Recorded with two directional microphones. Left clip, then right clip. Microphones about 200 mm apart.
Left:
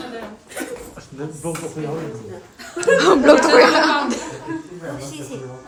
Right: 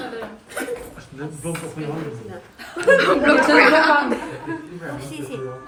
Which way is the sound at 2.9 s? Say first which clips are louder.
Left 4 dB; 15° left (ahead or behind).